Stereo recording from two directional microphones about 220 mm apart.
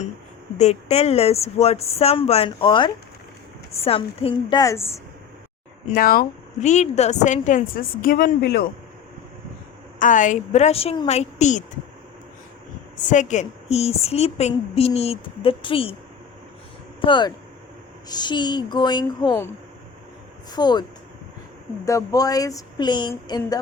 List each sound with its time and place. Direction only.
0.6 s a woman's voice: 30° left (ahead or behind); by 4.9 s 15° left (ahead or behind)
5.9 s a woman's voice: 40° left (ahead or behind)
10.0 s a woman's voice: 35° left (ahead or behind)
13.0 s a woman's voice: 35° left (ahead or behind)
17.0 s a woman's voice: 20° left (ahead or behind)
20.6 s a woman's voice: 20° left (ahead or behind)
21.8 s speech: 15° left (ahead or behind)